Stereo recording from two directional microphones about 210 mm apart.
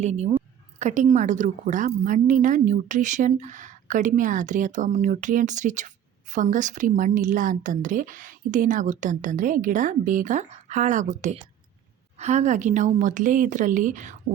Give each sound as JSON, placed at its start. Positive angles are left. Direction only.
{"t": 0.0, "sound": "a woman's voice", "side_deg": -30}